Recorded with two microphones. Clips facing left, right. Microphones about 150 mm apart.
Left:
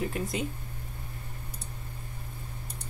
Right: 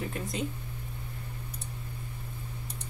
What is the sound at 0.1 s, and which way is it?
Speech, 5° left (ahead or behind).